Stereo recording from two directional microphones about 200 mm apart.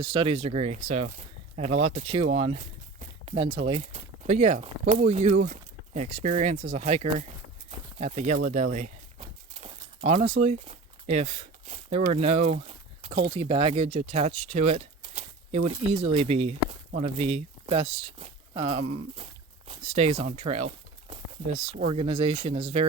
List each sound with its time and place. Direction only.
0.0 s speech: 25° right (ahead or behind)
3.0 s a sound: 30° right (ahead or behind)
3.7 s speech: 30° right (ahead or behind)